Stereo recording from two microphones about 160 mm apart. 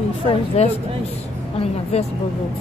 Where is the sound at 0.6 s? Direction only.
40° left (ahead or behind).